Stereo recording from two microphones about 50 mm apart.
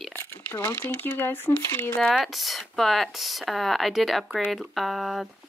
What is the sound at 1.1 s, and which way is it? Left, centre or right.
Speech, left.